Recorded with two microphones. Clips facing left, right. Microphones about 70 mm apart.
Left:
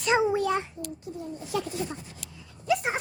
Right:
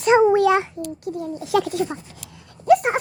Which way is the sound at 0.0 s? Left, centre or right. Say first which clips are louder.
Right 9 dB; right.